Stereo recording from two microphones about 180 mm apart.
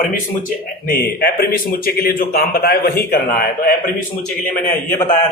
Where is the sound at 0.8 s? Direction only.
55° left (ahead or behind).